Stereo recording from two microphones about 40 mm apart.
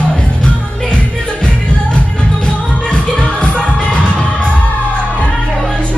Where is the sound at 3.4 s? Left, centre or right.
Left.